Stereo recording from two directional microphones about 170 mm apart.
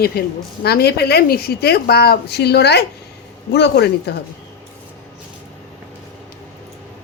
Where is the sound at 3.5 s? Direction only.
85° left.